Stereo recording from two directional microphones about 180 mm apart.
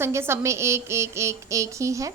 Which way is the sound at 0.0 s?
15° right (ahead or behind).